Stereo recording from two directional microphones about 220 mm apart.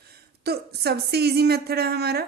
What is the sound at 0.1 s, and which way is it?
Speech, 45° right (ahead or behind).